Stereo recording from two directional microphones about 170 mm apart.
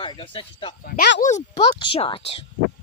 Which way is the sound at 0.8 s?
65° left (ahead or behind).